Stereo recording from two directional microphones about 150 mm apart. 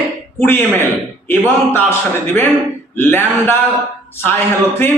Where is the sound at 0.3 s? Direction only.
15° left (ahead or behind).